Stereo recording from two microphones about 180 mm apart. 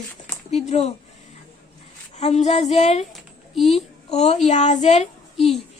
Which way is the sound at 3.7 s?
35° left (ahead or behind).